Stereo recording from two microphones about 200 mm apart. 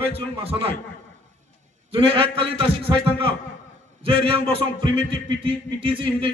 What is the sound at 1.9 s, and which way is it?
A man's voice, 25° right (ahead or behind).